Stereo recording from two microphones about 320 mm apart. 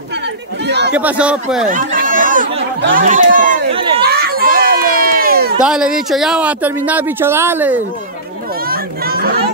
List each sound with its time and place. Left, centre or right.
0.7 s speech: right
0.9 s speech: centre
1.7 s chatter: right
5.6 s a woman's voice: centre
8.6 s a sound: right